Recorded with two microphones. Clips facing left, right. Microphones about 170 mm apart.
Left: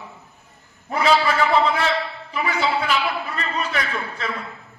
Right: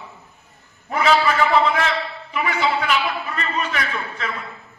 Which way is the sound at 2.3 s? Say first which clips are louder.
Right 1 dB; 35° left (ahead or behind).